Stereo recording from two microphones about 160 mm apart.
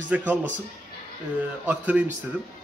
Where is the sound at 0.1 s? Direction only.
10° right (ahead or behind).